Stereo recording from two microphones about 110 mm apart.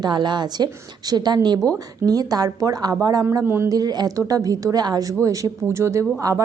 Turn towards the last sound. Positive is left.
turn(degrees=-25)  # may be behind; listen again after turning